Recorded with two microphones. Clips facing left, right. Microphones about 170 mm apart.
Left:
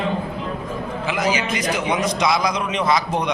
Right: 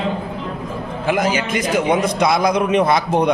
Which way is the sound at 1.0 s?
50° right (ahead or behind).